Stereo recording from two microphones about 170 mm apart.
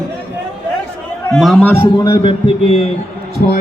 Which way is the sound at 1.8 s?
25° left (ahead or behind).